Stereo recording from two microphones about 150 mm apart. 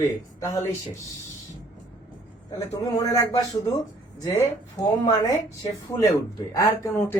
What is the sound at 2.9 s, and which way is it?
Speech, 25° left (ahead or behind).